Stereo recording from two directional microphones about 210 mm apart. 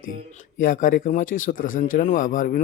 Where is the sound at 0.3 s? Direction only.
40° left (ahead or behind).